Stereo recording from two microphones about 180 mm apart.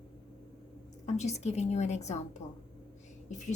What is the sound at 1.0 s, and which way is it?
A woman's voice, 40° left (ahead or behind).